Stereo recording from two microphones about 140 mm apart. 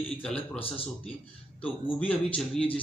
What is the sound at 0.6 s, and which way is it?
Speech, 45° left (ahead or behind).